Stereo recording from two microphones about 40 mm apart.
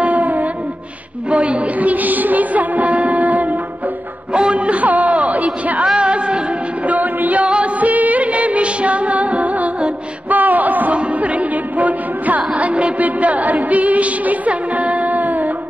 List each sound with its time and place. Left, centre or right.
0.0 s a sound: right
1.3 s music: right
4.3 s a sound: right
5.9 s music: right
6.9 s music: right
7.4 s music: right
7.8 s music of bollywood: right
10.3 s a sound: right
11.1 s music: right